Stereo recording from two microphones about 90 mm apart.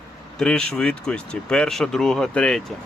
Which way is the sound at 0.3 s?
10° left (ahead or behind).